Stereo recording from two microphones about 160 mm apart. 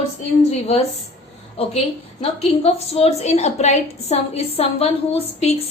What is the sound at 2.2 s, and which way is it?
A woman's voice, 40° left (ahead or behind).